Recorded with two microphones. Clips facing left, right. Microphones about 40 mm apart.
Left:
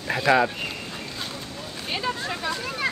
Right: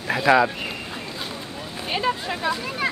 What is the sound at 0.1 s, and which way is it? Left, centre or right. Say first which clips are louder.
Speech: right 2 dB; centre.